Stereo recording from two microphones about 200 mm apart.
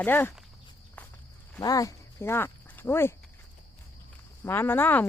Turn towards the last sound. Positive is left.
turn(degrees=10)  # may be behind; listen again after turning